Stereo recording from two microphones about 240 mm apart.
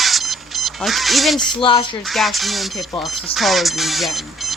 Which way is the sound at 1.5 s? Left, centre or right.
Left.